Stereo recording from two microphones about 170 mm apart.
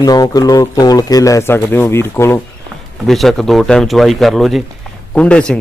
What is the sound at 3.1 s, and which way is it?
Speech, centre (ahead or behind).